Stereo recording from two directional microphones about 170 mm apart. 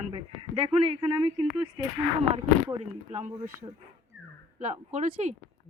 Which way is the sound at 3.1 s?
40° right (ahead or behind).